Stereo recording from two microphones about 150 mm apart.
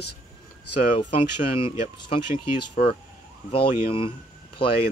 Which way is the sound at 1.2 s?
35° left (ahead or behind).